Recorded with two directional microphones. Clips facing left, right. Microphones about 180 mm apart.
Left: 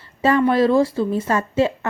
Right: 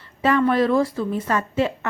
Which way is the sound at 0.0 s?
30° left (ahead or behind).